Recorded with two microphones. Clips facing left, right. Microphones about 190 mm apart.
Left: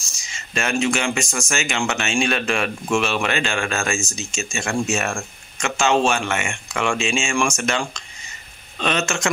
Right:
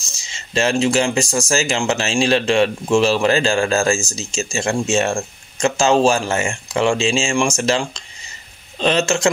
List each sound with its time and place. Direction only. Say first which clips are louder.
0.2 s speech: right 7 dB; 30° right (ahead or behind)